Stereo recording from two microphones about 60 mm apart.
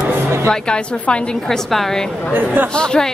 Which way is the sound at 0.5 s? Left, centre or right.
Centre.